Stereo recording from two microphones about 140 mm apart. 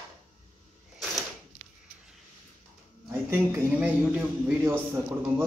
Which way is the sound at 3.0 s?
20° right (ahead or behind).